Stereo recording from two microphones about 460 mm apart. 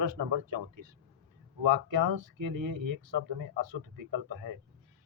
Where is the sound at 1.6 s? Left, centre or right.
Right.